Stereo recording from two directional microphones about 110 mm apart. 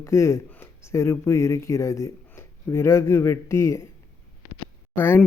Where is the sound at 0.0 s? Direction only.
25° left (ahead or behind).